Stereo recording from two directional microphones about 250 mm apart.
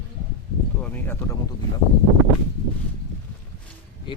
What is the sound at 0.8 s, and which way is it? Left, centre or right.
Speech, centre.